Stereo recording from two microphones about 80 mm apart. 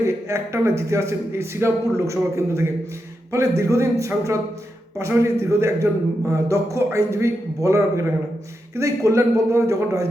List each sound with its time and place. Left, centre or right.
0.0 s speech: right